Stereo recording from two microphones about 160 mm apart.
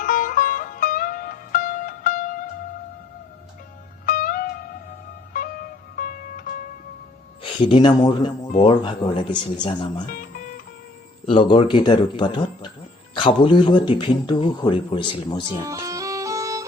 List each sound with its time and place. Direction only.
0.0 s music: 60° left (ahead or behind)
4.0 s music: 60° left (ahead or behind)
7.6 s speech: 30° left (ahead or behind)
10.1 s music: 60° left (ahead or behind)
11.3 s speech: 30° left (ahead or behind)
15.6 s music: 20° right (ahead or behind)